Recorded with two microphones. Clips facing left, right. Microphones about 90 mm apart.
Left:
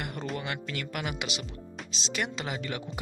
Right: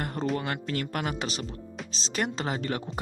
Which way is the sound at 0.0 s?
35° right (ahead or behind).